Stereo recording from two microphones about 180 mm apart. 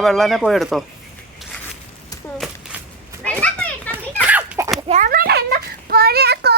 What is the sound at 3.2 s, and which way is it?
Children playing, 5° left (ahead or behind).